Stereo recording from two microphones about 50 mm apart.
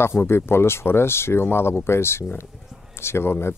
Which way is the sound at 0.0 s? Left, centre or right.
Left.